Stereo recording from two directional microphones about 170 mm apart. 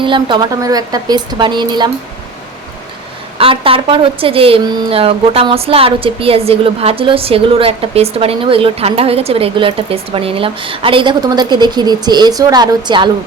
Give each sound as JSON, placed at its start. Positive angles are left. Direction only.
{"t": 0.0, "sound": "a woman's voice", "side_deg": -30}
{"t": 3.3, "sound": "a woman's voice", "side_deg": -30}